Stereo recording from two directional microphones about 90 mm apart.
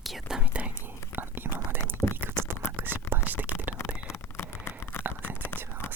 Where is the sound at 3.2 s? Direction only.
20° right (ahead or behind).